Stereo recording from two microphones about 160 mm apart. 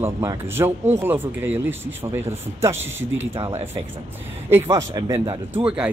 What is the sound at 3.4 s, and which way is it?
Speech, 40° right (ahead or behind).